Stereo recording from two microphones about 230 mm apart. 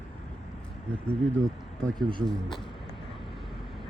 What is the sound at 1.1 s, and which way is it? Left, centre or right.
Speech, centre.